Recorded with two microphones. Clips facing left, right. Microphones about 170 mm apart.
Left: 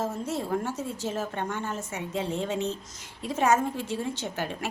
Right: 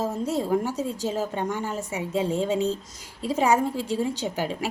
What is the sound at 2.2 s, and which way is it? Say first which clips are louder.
Speech: right 5 dB; 40° right (ahead or behind).